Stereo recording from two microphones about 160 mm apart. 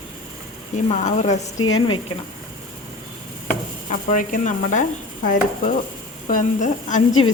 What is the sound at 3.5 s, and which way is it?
A woman's voice, 55° left (ahead or behind).